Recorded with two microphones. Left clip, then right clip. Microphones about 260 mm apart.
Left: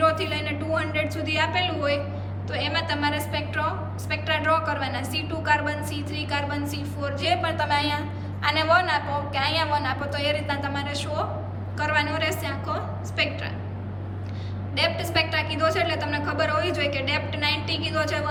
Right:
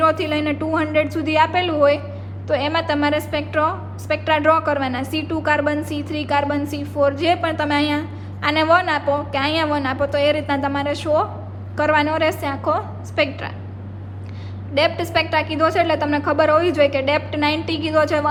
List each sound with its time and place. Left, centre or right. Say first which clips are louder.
0.0 s a woman's voice: right 5 dB; centre
14.8 s a woman's voice: right 6 dB; centre